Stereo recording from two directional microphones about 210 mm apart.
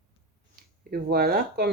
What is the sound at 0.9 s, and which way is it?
Speech, 45° right (ahead or behind).